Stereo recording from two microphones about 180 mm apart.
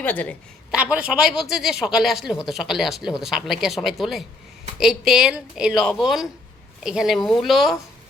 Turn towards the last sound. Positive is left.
turn(degrees=0)  # may be behind; listen again after turning